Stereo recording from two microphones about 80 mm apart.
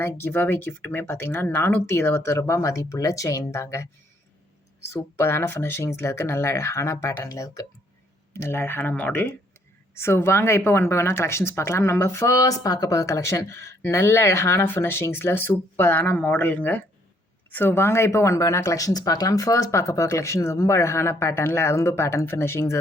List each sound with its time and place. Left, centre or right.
0.0 s speech: left
4.9 s speech: left
8.3 s speech: left